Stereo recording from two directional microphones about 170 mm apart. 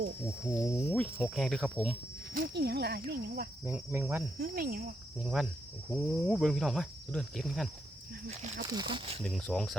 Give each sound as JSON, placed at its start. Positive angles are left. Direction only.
{"t": 0.6, "sound": "speech", "side_deg": 15}
{"t": 1.2, "sound": "speech", "side_deg": 0}
{"t": 2.3, "sound": "speech", "side_deg": -65}
{"t": 3.6, "sound": "cricket", "side_deg": -15}
{"t": 4.4, "sound": "cricket", "side_deg": -60}
{"t": 5.2, "sound": "speech", "side_deg": 0}
{"t": 8.3, "sound": "speech", "side_deg": -40}
{"t": 8.6, "sound": "speech", "side_deg": -25}
{"t": 9.2, "sound": "speech", "side_deg": 5}